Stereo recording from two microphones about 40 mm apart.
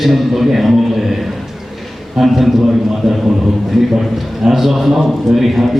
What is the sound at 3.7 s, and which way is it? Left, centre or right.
A man's voice, centre.